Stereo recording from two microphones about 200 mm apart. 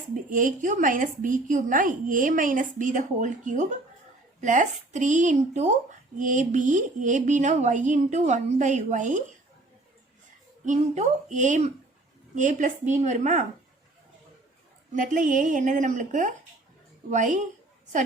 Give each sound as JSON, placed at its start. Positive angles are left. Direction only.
{"t": 0.3, "sound": "a woman's voice", "side_deg": -40}
{"t": 10.7, "sound": "a woman's voice", "side_deg": -35}
{"t": 14.9, "sound": "a woman's voice", "side_deg": -40}